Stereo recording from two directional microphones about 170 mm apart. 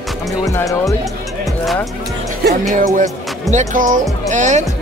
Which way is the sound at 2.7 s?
50° right (ahead or behind).